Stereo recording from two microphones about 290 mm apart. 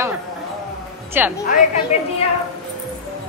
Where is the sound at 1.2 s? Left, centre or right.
Centre.